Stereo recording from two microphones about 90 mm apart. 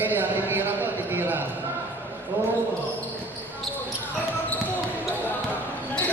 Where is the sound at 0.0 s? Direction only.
20° right (ahead or behind).